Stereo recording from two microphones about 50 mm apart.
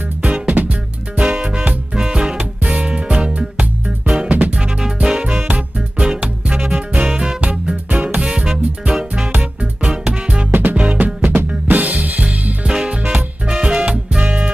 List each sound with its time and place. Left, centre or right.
0.2 s music: right
4.3 s music: right
4.6 s music: centre
10.5 s music: right
10.8 s music: right
11.2 s drum kit: right
12.6 s music: centre